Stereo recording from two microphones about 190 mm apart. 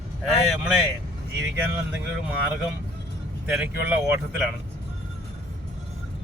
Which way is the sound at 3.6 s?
10° right (ahead or behind).